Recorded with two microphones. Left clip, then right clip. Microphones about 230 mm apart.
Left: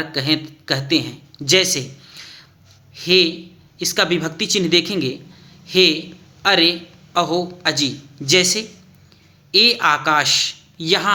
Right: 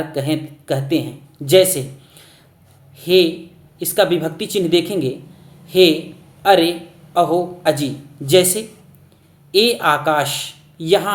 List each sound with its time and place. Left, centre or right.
0.1 s a man's voice: centre
9.5 s speech: centre